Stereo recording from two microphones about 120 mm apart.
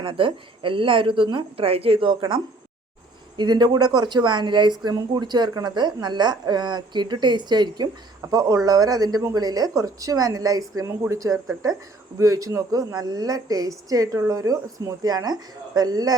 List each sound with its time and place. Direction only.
0.0 s a woman's voice: 45° right (ahead or behind)